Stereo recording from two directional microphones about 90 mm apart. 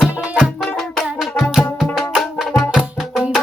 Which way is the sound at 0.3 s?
10° right (ahead or behind).